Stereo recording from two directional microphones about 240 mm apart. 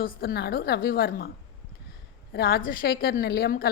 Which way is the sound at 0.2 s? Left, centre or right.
Left.